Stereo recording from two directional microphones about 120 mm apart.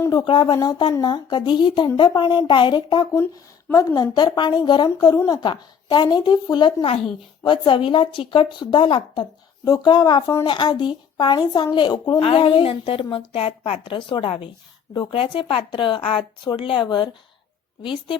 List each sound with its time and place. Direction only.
0.0 s a sound: 30° left (ahead or behind)
0.3 s a woman's voice: 45° left (ahead or behind)
3.7 s a woman's voice: 30° left (ahead or behind)